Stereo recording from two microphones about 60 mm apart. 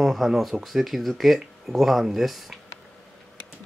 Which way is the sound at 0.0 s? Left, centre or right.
Centre.